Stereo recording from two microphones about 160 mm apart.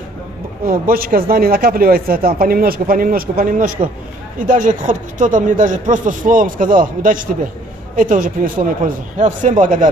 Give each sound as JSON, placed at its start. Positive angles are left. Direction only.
{"t": 0.7, "sound": "speech", "side_deg": -65}